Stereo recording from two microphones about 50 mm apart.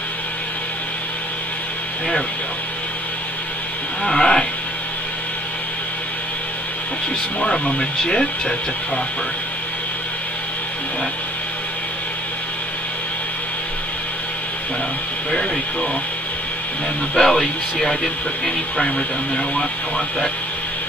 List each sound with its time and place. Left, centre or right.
4.0 s livestock: centre
7.3 s speech: centre
15.3 s speech: centre
17.1 s speech: centre
18.9 s speech: left